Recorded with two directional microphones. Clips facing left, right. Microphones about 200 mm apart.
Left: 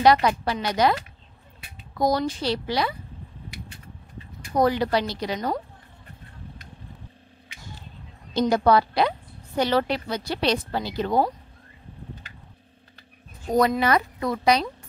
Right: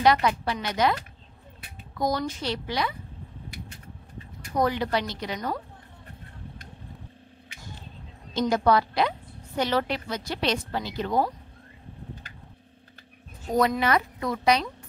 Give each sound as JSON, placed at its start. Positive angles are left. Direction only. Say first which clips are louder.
{"t": 0.0, "sound": "a woman's voice", "louder": "left 3 dB", "side_deg": 35}
{"t": 2.0, "sound": "a woman's voice", "louder": "left 4 dB", "side_deg": 35}
{"t": 4.6, "sound": "a woman's voice", "louder": "left 4 dB", "side_deg": 35}
{"t": 8.3, "sound": "a woman's voice", "louder": "left 3 dB", "side_deg": 35}
{"t": 13.6, "sound": "a woman's voice", "louder": "left 2 dB", "side_deg": 35}